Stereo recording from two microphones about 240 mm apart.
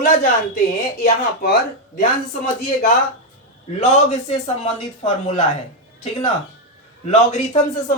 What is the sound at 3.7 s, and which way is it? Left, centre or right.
Speech, left.